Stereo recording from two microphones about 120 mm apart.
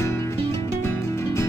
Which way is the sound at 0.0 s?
25° left (ahead or behind).